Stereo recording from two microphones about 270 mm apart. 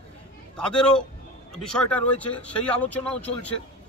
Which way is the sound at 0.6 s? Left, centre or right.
Centre.